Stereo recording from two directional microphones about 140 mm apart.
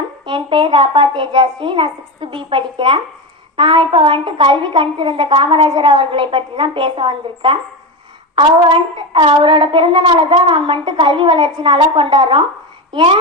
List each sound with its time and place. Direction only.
0.3 s a woman's voice: 35° right (ahead or behind)